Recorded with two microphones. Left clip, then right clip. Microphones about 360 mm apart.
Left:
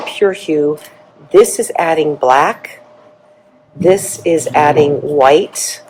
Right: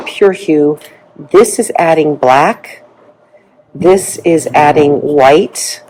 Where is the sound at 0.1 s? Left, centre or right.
Right.